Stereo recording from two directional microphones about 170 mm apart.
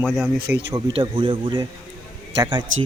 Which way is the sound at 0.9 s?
30° right (ahead or behind).